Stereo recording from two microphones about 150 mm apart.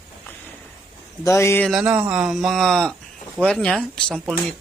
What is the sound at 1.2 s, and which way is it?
Speech, 20° left (ahead or behind).